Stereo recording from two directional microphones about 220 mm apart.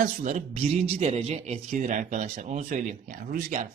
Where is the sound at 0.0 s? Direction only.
35° right (ahead or behind).